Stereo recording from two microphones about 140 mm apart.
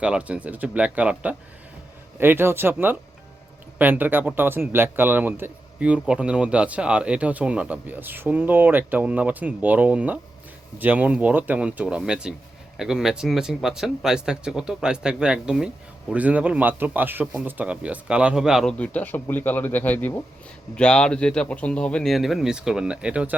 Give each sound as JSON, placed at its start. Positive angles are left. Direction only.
{"t": 0.0, "sound": "a man's voice", "side_deg": -10}